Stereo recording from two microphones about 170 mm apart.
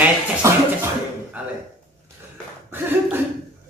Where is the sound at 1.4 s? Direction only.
10° right (ahead or behind).